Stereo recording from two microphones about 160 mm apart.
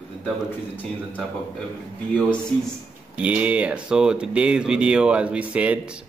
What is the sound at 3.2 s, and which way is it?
Speech, 10° right (ahead or behind).